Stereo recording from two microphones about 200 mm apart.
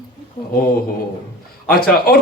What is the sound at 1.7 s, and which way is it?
Speech, 50° left (ahead or behind).